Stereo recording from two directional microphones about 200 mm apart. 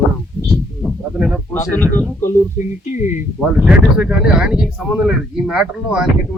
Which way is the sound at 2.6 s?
40° left (ahead or behind).